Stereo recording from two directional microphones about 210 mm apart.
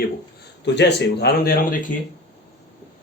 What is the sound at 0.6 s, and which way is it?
Speech, 55° left (ahead or behind).